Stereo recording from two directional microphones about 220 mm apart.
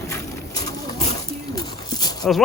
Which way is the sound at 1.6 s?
20° left (ahead or behind).